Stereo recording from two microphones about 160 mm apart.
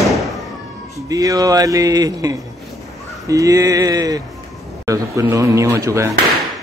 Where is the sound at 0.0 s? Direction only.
Centre (ahead or behind).